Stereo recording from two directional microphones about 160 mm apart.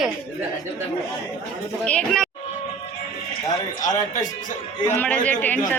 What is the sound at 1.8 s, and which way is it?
Speech, 5° left (ahead or behind).